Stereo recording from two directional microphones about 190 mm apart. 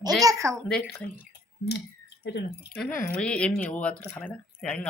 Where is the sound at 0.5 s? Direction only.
5° left (ahead or behind).